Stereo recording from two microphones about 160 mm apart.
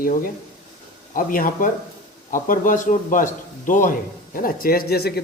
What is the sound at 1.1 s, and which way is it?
Speech, 60° left (ahead or behind).